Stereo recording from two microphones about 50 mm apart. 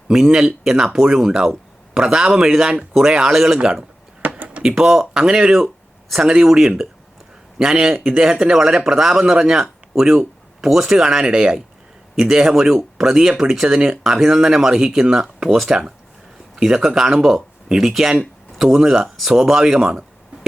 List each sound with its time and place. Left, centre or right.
0.1 s speech: centre
4.6 s speech: centre
19.0 s speech: centre
19.3 s speech: centre